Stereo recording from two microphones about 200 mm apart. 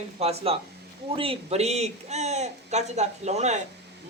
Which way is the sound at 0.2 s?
30° right (ahead or behind).